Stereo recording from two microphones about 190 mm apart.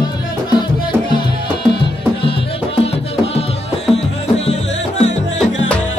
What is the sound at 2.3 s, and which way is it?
Music, 30° left (ahead or behind).